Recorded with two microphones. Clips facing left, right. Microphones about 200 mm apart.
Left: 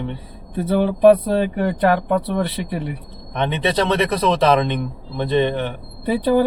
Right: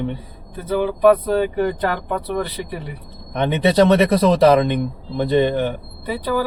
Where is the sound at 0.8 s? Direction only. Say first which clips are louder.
Left 2 dB; 30° left (ahead or behind).